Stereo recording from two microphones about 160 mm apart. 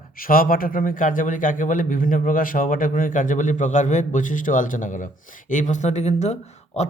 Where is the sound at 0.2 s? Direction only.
65° left (ahead or behind).